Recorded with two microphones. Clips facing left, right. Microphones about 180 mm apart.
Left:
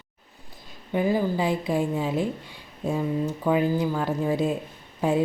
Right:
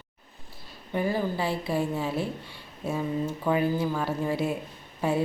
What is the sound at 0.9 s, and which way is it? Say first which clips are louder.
A woman's voice: left 4 dB; 15° left (ahead or behind).